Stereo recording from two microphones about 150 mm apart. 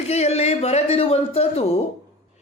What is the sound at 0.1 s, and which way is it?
Speech, 45° left (ahead or behind).